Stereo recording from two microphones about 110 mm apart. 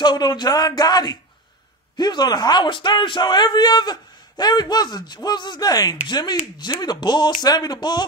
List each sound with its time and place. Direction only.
0.0 s speech: 40° left (ahead or behind)